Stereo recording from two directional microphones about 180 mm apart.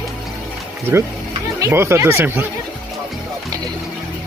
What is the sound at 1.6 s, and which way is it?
Speech, 15° right (ahead or behind).